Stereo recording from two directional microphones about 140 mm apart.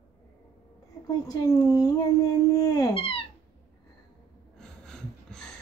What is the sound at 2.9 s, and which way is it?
Cat, 40° left (ahead or behind).